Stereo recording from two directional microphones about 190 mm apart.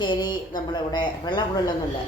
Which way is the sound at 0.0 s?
25° left (ahead or behind).